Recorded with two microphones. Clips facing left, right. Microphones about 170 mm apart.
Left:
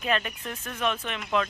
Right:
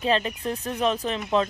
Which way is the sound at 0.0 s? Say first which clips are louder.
Right 5 dB; 30° right (ahead or behind).